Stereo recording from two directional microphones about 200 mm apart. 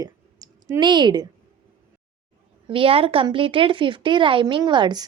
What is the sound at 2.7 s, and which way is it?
A woman's voice, 25° right (ahead or behind).